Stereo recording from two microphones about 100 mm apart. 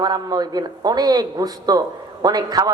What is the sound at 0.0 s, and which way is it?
A man's voice, 45° right (ahead or behind).